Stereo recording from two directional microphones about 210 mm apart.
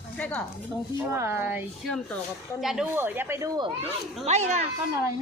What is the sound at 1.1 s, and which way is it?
A woman's voice, 10° right (ahead or behind).